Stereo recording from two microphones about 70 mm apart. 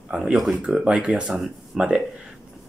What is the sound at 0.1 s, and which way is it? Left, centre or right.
Speech, centre.